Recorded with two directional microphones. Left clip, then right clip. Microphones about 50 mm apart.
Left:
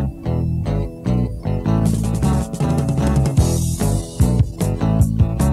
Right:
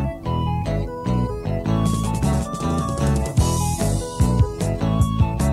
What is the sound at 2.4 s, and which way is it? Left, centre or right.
Music, left.